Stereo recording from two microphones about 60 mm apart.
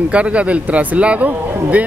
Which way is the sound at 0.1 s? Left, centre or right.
Right.